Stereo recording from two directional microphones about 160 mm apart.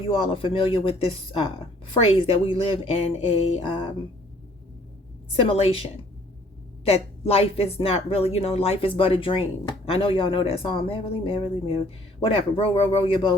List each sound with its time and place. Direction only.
0.3 s speech: 35° left (ahead or behind)
5.3 s speech: 35° left (ahead or behind)
6.8 s speech: 40° left (ahead or behind)